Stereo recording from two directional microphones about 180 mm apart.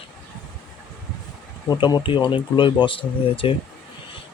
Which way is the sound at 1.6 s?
20° left (ahead or behind).